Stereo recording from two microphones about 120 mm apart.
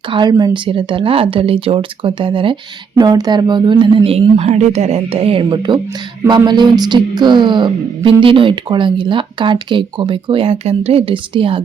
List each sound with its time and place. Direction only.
0.1 s speech: 40° right (ahead or behind)
3.0 s speech: 35° right (ahead or behind)